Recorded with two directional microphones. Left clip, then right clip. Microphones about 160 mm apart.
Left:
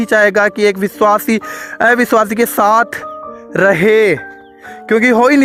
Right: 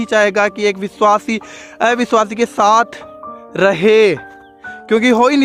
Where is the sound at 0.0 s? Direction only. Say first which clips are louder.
Left 3 dB; 40° left (ahead or behind).